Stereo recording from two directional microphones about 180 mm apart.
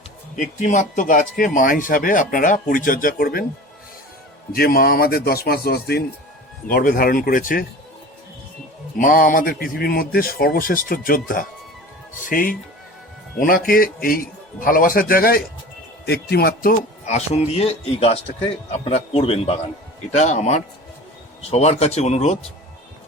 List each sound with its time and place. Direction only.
0.3 s speech: 45° left (ahead or behind)
4.5 s speech: 55° left (ahead or behind)
9.0 s speech: 50° left (ahead or behind)
17.1 s a man's voice: 40° left (ahead or behind)